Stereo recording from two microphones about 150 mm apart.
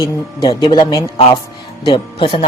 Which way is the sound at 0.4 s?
30° left (ahead or behind).